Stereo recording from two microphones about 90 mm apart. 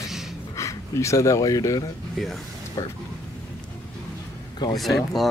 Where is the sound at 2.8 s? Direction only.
35° left (ahead or behind).